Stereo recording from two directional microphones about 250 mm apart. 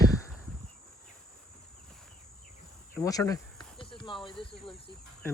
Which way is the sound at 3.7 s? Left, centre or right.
Centre.